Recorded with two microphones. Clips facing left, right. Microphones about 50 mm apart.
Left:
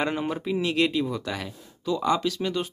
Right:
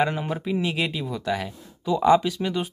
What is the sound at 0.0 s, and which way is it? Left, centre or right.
Speech, centre.